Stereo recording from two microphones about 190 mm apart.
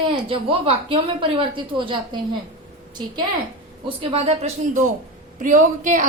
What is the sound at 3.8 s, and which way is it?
A woman's voice, 30° right (ahead or behind).